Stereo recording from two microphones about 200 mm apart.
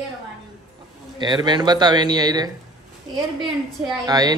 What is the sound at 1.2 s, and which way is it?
Speech, 20° right (ahead or behind).